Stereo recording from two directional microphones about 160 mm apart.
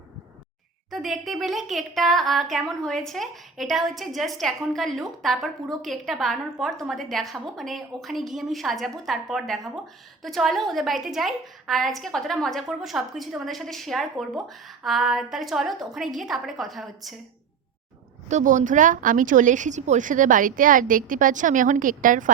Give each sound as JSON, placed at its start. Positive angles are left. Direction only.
{"t": 1.2, "sound": "a woman's voice", "side_deg": 0}
{"t": 18.3, "sound": "speech", "side_deg": -50}